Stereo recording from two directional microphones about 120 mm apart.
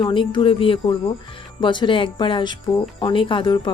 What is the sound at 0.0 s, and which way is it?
Speech, 40° left (ahead or behind).